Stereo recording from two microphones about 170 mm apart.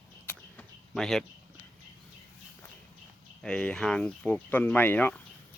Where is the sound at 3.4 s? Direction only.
5° left (ahead or behind).